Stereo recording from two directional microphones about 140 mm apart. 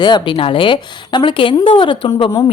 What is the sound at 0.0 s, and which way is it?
Speech, 35° left (ahead or behind).